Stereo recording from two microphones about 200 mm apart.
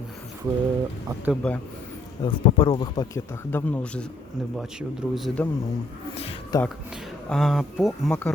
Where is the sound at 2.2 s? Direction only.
25° left (ahead or behind).